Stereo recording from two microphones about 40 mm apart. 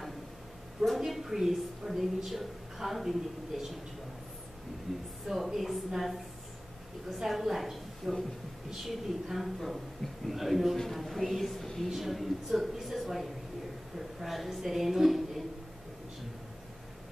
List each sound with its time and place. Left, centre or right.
1.0 s a woman's voice: centre
4.9 s a woman's voice: centre
11.9 s a woman's voice: centre